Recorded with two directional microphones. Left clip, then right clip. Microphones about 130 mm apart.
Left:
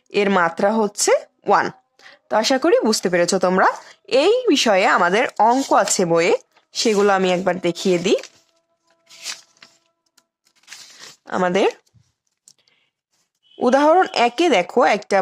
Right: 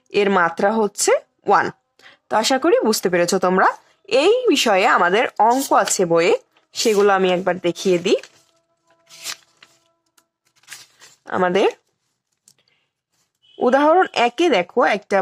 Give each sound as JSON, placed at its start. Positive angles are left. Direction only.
{"t": 0.1, "sound": "speech", "side_deg": 30}
{"t": 10.5, "sound": "tearing", "side_deg": 30}
{"t": 12.5, "sound": "computer keyboard", "side_deg": 35}
{"t": 13.4, "sound": "a sound", "side_deg": 30}
{"t": 13.7, "sound": "speech", "side_deg": 30}